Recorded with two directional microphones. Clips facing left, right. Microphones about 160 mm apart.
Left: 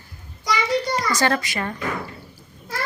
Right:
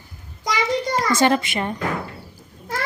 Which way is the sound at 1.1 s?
20° right (ahead or behind).